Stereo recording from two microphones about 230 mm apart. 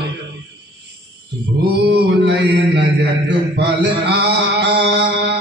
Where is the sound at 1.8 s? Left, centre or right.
Right.